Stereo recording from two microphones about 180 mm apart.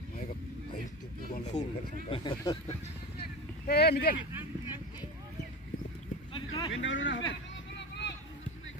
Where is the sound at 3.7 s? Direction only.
60° left (ahead or behind).